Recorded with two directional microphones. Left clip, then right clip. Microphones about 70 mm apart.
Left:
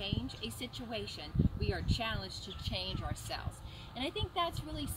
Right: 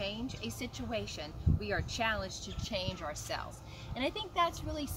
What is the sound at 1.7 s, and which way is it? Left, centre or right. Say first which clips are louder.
Speech: right 7 dB; right.